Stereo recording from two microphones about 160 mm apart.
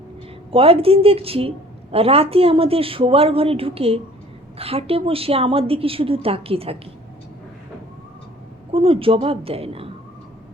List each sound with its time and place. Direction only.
0.5 s a woman's voice: 35° right (ahead or behind)
8.7 s a woman's voice: 35° right (ahead or behind)